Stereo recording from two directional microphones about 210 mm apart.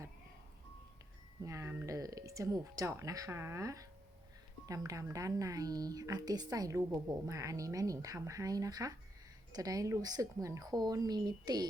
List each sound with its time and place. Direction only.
1.5 s speech: 15° right (ahead or behind)